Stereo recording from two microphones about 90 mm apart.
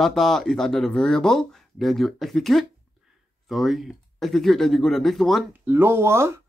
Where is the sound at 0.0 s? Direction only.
5° left (ahead or behind).